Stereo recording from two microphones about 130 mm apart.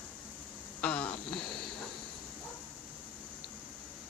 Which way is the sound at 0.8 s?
10° left (ahead or behind).